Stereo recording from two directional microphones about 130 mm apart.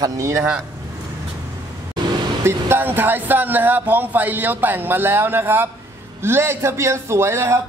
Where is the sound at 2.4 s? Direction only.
15° right (ahead or behind).